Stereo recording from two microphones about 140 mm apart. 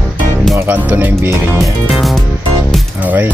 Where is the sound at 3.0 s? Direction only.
10° right (ahead or behind).